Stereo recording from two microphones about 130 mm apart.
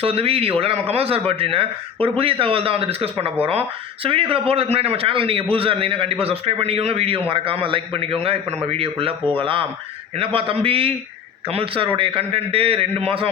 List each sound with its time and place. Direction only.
0.0 s a man's voice: 50° right (ahead or behind)